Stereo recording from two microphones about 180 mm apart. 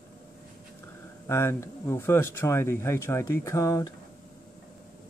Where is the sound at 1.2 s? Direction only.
15° left (ahead or behind).